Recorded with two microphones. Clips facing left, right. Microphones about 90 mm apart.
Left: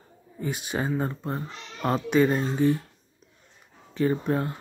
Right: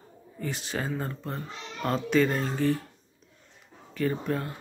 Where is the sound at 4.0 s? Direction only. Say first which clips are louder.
Left 4 dB; 25° left (ahead or behind).